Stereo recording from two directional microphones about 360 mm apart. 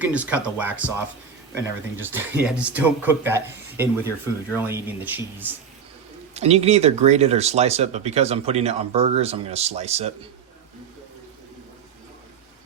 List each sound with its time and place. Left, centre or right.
0.0 s speech: centre
6.3 s speech: centre